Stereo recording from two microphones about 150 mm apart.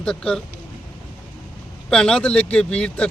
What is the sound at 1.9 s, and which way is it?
Speech, 5° left (ahead or behind).